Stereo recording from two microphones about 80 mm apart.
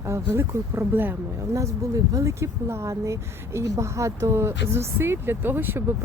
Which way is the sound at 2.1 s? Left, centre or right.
Right.